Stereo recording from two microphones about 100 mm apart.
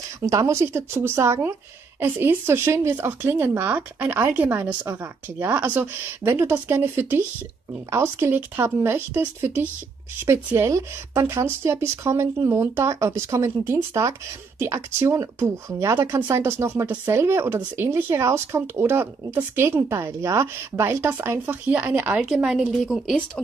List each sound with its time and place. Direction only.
0.3 s speech: 30° right (ahead or behind)
22.2 s speech: 5° right (ahead or behind)